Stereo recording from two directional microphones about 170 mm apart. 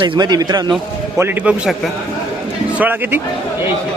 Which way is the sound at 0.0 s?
25° right (ahead or behind).